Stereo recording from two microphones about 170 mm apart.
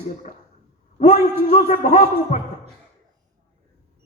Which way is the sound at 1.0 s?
45° left (ahead or behind).